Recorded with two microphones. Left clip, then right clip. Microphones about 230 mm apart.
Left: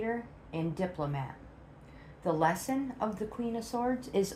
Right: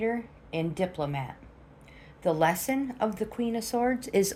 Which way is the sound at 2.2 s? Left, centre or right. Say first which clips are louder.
Right 4 dB; right.